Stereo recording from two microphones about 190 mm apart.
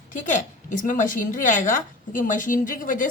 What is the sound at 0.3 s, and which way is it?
A woman's voice, 45° left (ahead or behind).